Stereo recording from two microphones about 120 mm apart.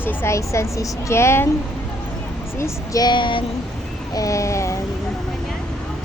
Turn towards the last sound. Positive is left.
turn(degrees=25)  # may be behind; listen again after turning